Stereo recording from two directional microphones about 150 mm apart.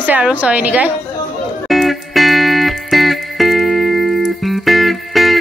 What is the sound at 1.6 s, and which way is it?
Music, centre (ahead or behind).